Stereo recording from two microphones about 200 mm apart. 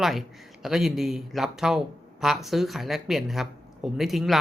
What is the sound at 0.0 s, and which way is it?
Speech, centre (ahead or behind).